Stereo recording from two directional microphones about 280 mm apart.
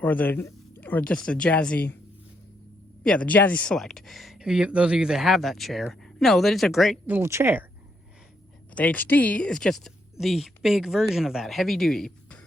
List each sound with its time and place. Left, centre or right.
0.0 s speech: centre
3.0 s speech: centre
8.7 s speech: centre